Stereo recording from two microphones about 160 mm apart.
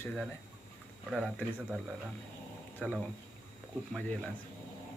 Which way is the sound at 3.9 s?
5° left (ahead or behind).